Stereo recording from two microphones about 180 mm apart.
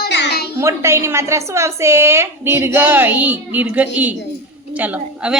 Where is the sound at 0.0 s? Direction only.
70° left (ahead or behind).